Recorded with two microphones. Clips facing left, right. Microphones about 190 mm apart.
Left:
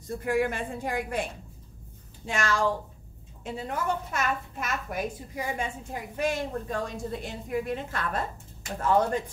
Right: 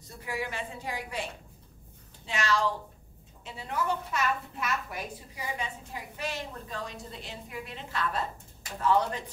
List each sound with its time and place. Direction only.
0.2 s a woman's voice: 50° left (ahead or behind)
2.2 s a woman's voice: 50° left (ahead or behind)